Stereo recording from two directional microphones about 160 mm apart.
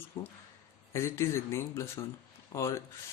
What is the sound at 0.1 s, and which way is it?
Speech, 25° left (ahead or behind).